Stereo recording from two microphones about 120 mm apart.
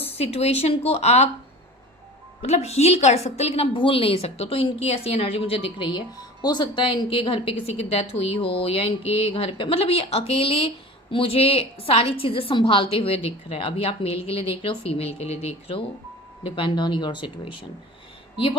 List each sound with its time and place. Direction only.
0.0 s speech: 60° left (ahead or behind)
2.4 s a woman's voice: 60° left (ahead or behind)
16.4 s speech: 45° left (ahead or behind)